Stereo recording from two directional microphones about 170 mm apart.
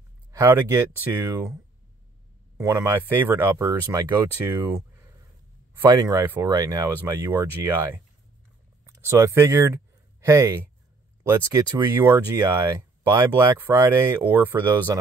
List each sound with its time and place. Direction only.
0.3 s speech: 15° right (ahead or behind)